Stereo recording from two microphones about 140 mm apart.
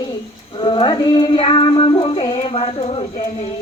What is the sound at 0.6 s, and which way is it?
Child singing, 35° left (ahead or behind).